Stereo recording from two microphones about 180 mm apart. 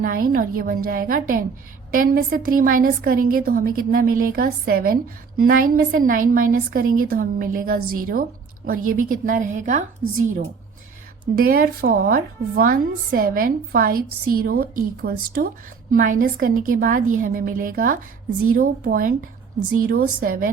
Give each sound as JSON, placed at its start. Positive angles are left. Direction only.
{"t": 0.0, "sound": "a woman's voice", "side_deg": -50}
{"t": 11.3, "sound": "a woman's voice", "side_deg": -55}